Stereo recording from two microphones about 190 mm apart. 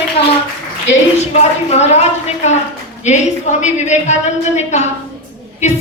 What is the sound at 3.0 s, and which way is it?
A woman's voice, 40° left (ahead or behind).